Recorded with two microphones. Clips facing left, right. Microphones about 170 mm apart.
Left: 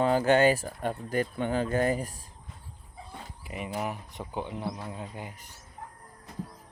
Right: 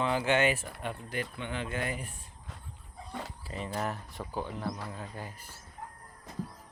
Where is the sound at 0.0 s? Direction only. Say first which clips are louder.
Left 5 dB; 40° left (ahead or behind).